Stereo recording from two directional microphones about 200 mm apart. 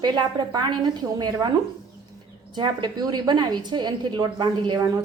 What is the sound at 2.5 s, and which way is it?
A woman's voice, 20° right (ahead or behind).